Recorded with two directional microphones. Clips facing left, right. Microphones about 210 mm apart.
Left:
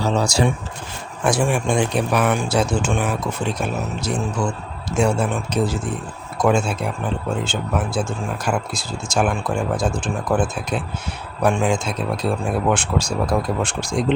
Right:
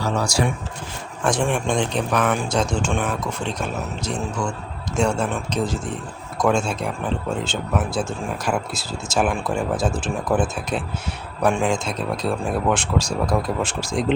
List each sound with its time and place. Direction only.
0.0 s speech: 25° left (ahead or behind)
1.2 s speech: 10° left (ahead or behind)